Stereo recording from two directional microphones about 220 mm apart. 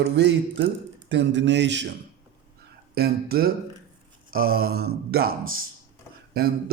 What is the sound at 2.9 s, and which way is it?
Speech, 45° right (ahead or behind).